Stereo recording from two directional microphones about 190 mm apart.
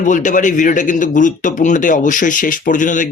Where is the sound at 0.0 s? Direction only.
40° left (ahead or behind).